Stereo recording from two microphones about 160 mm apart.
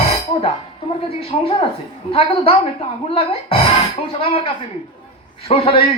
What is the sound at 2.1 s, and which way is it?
A man's voice, 35° left (ahead or behind).